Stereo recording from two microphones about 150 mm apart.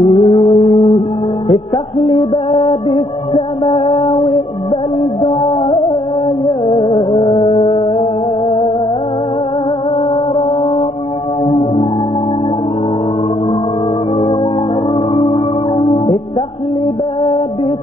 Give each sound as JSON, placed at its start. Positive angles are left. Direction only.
{"t": 0.1, "sound": "music", "side_deg": 35}
{"t": 2.0, "sound": "music", "side_deg": 35}
{"t": 11.4, "sound": "music", "side_deg": 40}
{"t": 15.1, "sound": "singing bowl", "side_deg": 35}